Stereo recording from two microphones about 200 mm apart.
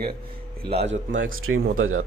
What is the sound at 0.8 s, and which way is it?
A man's voice, 65° right (ahead or behind).